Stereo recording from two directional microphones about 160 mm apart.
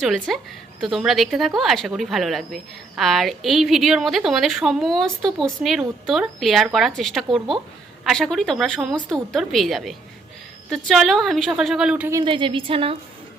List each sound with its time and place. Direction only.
0.0 s speech: centre (ahead or behind)
12.1 s a woman's voice: 30° right (ahead or behind)